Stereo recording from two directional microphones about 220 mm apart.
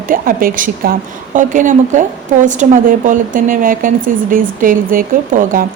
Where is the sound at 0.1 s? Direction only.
40° right (ahead or behind).